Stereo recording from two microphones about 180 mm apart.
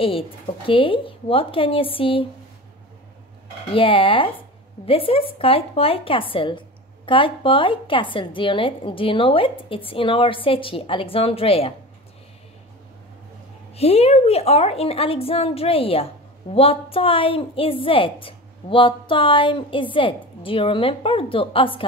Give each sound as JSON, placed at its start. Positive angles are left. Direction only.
{"t": 0.7, "sound": "a woman's voice", "side_deg": 30}
{"t": 3.7, "sound": "a woman's voice", "side_deg": 30}
{"t": 13.7, "sound": "a woman's voice", "side_deg": 35}